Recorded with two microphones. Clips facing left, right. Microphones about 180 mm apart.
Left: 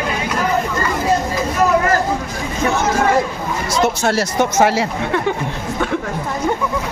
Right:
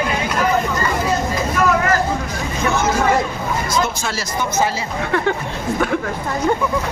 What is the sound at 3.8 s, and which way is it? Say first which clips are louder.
Speech: left 7 dB; 70° left (ahead or behind).